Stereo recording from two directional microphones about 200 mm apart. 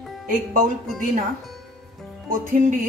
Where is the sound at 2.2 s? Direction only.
45° right (ahead or behind).